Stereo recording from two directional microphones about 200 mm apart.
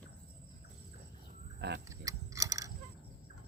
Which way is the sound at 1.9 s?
15° right (ahead or behind).